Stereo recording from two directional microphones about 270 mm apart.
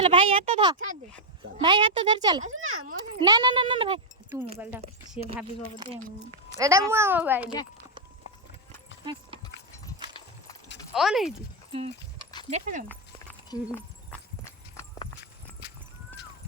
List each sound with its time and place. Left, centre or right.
0.0 s a child's voice: right
2.6 s speech: right
3.2 s speech: centre
5.8 s speech: right
6.6 s a child's voice: centre
10.9 s speech: centre
11.7 s horse: right
12.5 s speech: right
13.5 s clip-clop: centre